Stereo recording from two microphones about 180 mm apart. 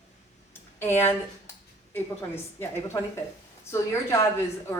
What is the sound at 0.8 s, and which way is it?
A woman's voice, 10° left (ahead or behind).